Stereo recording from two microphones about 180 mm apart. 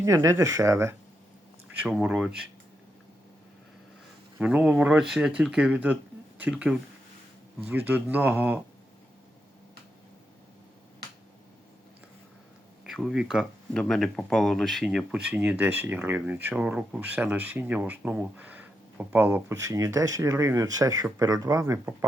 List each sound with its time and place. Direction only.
0.0 s speech: 15° right (ahead or behind)
4.4 s speech: 5° right (ahead or behind)
12.8 s speech: 5° right (ahead or behind)